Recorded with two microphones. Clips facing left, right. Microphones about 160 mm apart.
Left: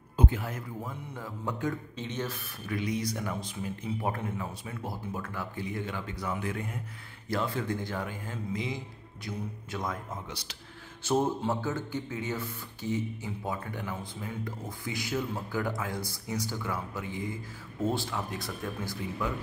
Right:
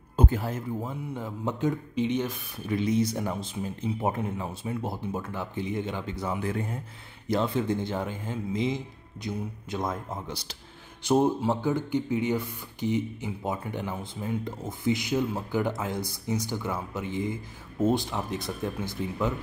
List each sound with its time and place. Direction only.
0.1 s a sound: 45° right (ahead or behind)
0.5 s speech: 25° right (ahead or behind)
2.7 s speech: 25° right (ahead or behind)
11.1 s speech: 15° right (ahead or behind)